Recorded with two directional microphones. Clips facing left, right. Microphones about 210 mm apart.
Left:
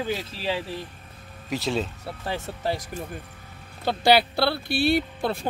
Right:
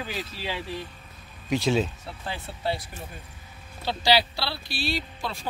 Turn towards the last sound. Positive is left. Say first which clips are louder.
# left 8 dB
turn(degrees=60)  # may be behind; listen again after turning